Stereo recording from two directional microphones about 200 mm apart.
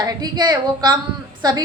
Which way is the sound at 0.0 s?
20° right (ahead or behind).